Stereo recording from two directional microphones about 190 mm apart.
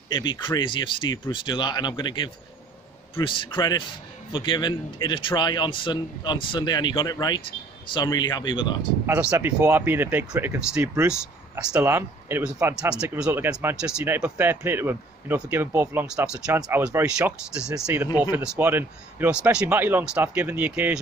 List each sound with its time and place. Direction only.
0.1 s a man's voice: 25° left (ahead or behind)
9.0 s speech: 10° right (ahead or behind)